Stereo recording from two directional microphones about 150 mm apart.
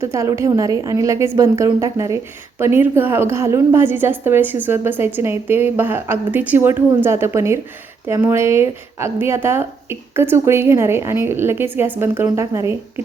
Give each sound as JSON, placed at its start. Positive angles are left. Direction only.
{"t": 0.0, "sound": "a woman's voice", "side_deg": -20}